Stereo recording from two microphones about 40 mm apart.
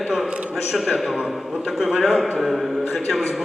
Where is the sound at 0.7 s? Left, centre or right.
Centre.